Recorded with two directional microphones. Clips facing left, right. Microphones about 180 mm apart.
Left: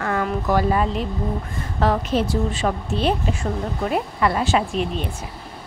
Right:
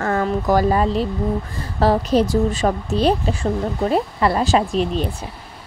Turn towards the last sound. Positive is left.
turn(degrees=-35)  # may be behind; listen again after turning